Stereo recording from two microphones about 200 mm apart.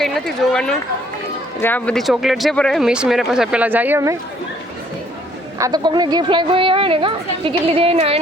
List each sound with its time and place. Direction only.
1.6 s speech: 5° left (ahead or behind); by 4.2 s 15° right (ahead or behind)
5.5 s a woman's voice: 20° right (ahead or behind)